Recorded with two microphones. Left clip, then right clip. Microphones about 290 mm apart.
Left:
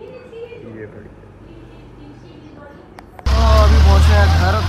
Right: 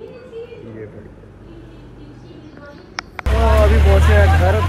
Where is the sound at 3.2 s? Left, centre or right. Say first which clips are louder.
Even; left.